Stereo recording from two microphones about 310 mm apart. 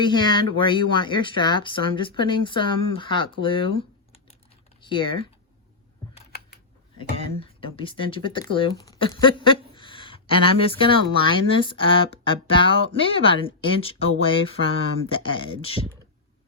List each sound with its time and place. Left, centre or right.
0.0 s speech: centre
4.9 s speech: centre
7.0 s speech: centre